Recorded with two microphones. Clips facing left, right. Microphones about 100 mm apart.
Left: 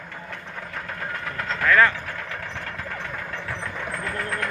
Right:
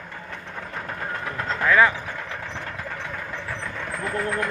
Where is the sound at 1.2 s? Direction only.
15° right (ahead or behind).